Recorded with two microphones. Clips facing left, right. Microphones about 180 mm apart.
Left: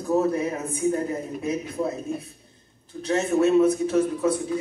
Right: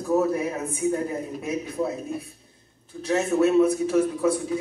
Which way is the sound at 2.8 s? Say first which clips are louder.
Even; 25° left (ahead or behind).